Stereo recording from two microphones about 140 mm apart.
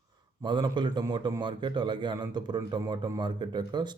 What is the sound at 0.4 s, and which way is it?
A man's voice, 35° right (ahead or behind).